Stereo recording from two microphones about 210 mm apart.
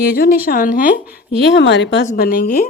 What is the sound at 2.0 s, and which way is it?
Speech, 40° left (ahead or behind).